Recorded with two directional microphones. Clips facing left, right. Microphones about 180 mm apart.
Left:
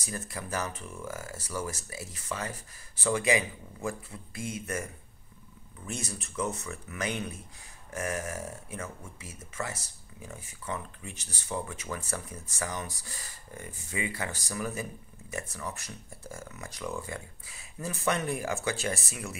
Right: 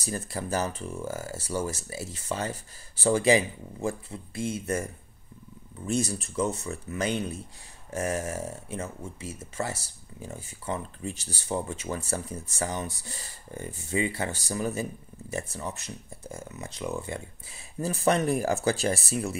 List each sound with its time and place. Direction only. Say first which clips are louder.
0.0 s speech: right 5 dB; 30° right (ahead or behind)
5.9 s speech: right 10 dB; 35° right (ahead or behind)